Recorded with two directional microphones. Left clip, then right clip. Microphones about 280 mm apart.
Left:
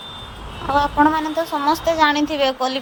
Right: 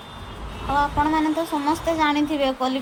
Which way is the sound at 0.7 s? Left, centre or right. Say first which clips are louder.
Left 4 dB; left.